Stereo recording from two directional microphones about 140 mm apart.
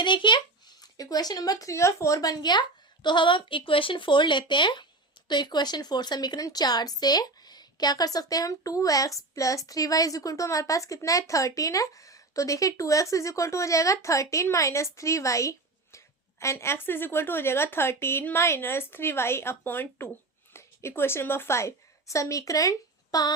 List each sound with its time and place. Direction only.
0.0 s a child's voice: 35° left (ahead or behind)